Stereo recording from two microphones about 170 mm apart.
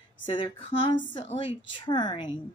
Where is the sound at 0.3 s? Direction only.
40° left (ahead or behind).